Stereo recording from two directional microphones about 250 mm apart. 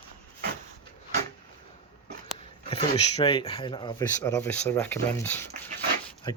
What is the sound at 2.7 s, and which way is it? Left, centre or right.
Speech, left.